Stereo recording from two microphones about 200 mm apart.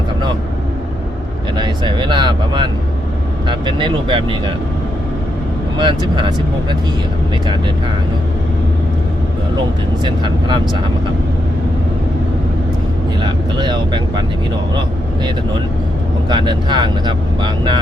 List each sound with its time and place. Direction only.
1.5 s speech: 20° right (ahead or behind)
5.7 s speech: 20° right (ahead or behind)
10.0 s speech: 25° right (ahead or behind)
13.2 s speech: 20° right (ahead or behind)
16.3 s speech: 20° right (ahead or behind)